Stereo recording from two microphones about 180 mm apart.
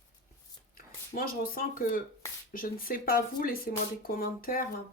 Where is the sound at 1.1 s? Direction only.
50° left (ahead or behind).